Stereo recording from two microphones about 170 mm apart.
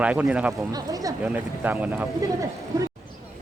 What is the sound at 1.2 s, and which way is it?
Speech, 10° right (ahead or behind).